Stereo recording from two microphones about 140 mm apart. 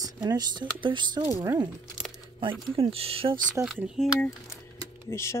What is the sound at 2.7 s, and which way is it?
Speech, 45° right (ahead or behind).